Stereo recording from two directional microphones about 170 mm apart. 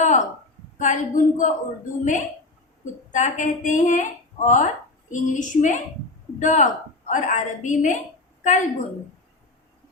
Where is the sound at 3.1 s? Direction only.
45° left (ahead or behind).